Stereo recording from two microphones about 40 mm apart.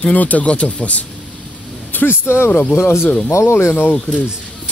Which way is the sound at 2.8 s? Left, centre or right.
Left.